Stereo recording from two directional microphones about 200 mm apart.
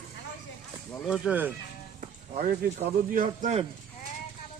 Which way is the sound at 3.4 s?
35° right (ahead or behind).